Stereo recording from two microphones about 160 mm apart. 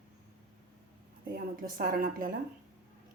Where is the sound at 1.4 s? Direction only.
65° right (ahead or behind).